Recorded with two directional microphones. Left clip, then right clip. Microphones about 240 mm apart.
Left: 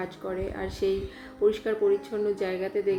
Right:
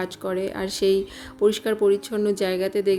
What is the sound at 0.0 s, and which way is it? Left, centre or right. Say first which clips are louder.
Speech: right 6 dB; right.